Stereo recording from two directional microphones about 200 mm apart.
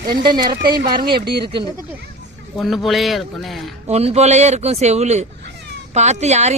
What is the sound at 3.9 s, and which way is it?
Speech, 30° right (ahead or behind).